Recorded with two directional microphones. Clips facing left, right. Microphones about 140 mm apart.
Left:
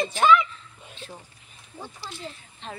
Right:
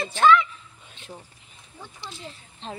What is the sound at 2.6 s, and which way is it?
Speech, 30° right (ahead or behind).